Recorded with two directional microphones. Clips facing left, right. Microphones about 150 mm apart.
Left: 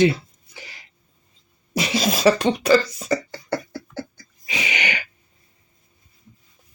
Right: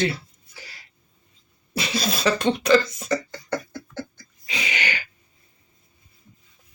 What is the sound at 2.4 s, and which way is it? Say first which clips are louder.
Speech: left 1 dB; 10° left (ahead or behind).